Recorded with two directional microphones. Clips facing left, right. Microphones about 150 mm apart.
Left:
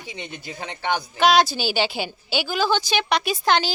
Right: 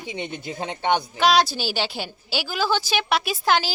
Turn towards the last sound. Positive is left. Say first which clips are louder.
# left 1 dB
turn(degrees=-5)  # may be behind; listen again after turning